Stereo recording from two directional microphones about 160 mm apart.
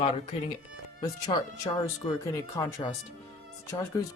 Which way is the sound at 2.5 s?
15° left (ahead or behind).